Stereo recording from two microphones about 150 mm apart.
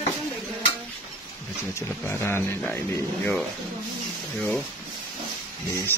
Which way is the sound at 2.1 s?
15° left (ahead or behind).